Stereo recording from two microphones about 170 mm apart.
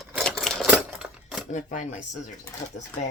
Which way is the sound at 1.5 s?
45° left (ahead or behind).